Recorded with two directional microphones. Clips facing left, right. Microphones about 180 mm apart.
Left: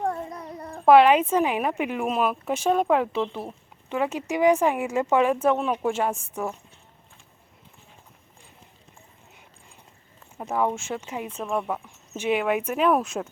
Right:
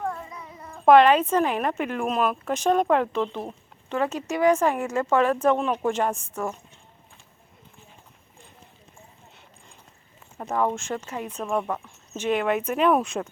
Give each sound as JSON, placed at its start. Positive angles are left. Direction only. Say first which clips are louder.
{"t": 0.3, "sound": "cat", "louder": "left 5 dB", "side_deg": 45}
{"t": 0.9, "sound": "speech", "louder": "even", "side_deg": 10}
{"t": 10.3, "sound": "speech", "louder": "even", "side_deg": 5}